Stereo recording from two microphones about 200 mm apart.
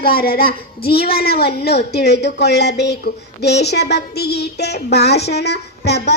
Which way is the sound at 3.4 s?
55° left (ahead or behind).